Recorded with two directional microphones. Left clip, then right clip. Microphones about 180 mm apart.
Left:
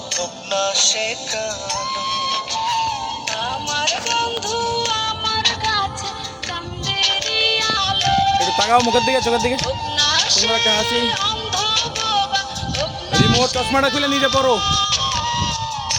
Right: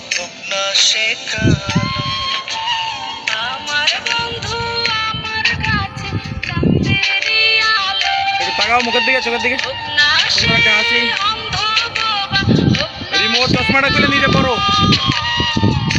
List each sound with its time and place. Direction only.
0.1 s music: 50° left (ahead or behind)
7.2 s music: 50° left (ahead or behind)